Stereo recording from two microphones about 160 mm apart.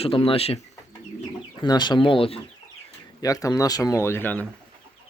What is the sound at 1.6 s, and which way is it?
Speech, 30° left (ahead or behind).